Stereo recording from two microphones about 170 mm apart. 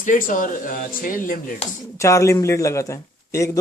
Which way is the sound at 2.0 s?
20° left (ahead or behind).